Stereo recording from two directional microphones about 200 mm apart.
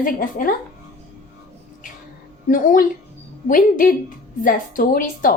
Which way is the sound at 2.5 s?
45° left (ahead or behind).